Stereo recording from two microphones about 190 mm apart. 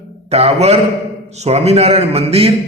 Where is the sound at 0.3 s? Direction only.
35° right (ahead or behind).